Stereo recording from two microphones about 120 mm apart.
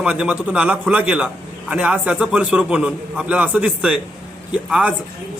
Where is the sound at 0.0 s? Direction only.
10° right (ahead or behind).